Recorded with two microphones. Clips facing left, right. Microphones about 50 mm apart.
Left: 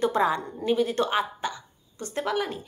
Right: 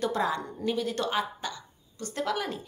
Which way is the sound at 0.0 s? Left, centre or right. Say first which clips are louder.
Left 5 dB; left.